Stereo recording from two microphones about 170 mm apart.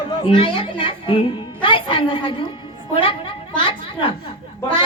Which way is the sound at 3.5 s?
30° left (ahead or behind).